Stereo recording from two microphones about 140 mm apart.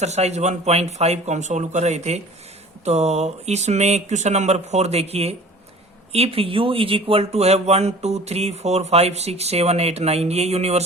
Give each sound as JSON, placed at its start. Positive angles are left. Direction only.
{"t": 0.0, "sound": "speech", "side_deg": -50}